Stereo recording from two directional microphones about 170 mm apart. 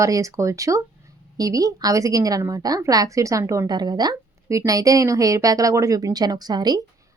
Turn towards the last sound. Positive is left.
turn(degrees=-25)  # may be behind; listen again after turning